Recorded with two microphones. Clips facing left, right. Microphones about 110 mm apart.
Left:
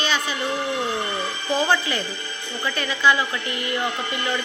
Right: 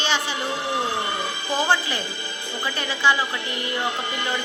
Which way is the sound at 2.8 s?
30° right (ahead or behind).